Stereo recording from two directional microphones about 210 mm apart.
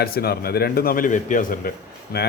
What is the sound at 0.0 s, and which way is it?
Speech, 45° left (ahead or behind).